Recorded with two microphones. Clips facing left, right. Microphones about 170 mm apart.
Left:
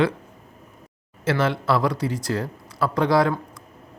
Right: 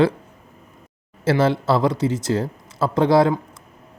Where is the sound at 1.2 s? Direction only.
30° right (ahead or behind).